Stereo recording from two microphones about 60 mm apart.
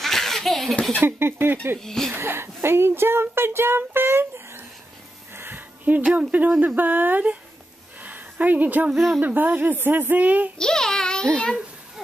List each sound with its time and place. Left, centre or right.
0.0 s laughter: centre
1.0 s a woman's voice: right
1.8 s speech: centre
2.1 s speech: right
5.3 s a sound: right
6.1 s speech: right
8.0 s a sound: right
8.9 s speech: centre
9.2 s a woman's voice: right
10.6 s a sound: centre